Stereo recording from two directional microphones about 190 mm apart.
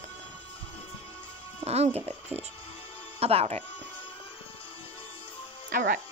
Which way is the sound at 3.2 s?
35° right (ahead or behind).